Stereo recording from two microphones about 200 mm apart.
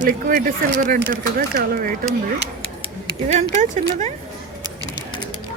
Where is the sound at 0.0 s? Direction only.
45° right (ahead or behind).